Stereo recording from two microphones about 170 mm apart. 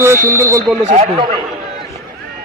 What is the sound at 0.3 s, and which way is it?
Speech, 15° right (ahead or behind).